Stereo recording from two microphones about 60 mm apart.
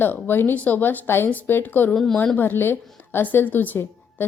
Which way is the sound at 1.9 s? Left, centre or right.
Centre.